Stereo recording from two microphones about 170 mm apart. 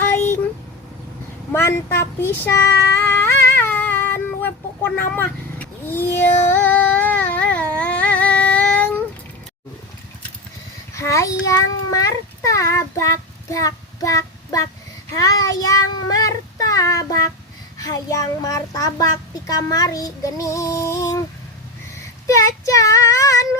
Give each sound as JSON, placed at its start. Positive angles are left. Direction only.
{"t": 0.1, "sound": "a sound", "side_deg": 10}
{"t": 1.5, "sound": "a child's voice", "side_deg": 15}
{"t": 3.0, "sound": "a sound", "side_deg": 10}
{"t": 3.5, "sound": "cat", "side_deg": 10}
{"t": 10.9, "sound": "a child's voice", "side_deg": 15}
{"t": 16.6, "sound": "child singing", "side_deg": 20}
{"t": 17.7, "sound": "a child's voice", "side_deg": 20}
{"t": 22.3, "sound": "child singing", "side_deg": 20}